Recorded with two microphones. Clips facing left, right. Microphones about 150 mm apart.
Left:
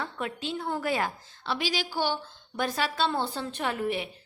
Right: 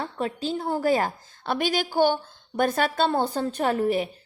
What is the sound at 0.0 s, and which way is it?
A woman's voice, 35° right (ahead or behind).